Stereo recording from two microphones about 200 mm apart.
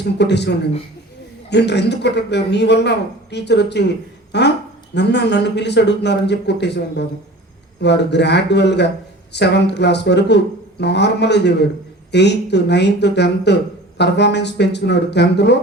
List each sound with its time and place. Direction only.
0.0 s a man's voice: 60° left (ahead or behind)